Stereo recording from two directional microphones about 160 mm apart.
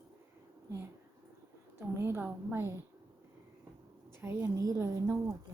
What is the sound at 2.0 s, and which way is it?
Speech, 15° right (ahead or behind).